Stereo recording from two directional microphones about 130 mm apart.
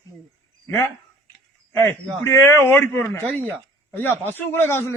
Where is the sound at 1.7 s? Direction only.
20° left (ahead or behind).